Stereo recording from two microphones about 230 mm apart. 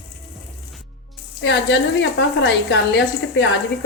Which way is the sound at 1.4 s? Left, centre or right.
Left.